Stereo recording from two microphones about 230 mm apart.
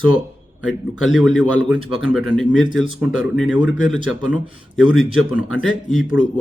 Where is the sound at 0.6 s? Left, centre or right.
Centre.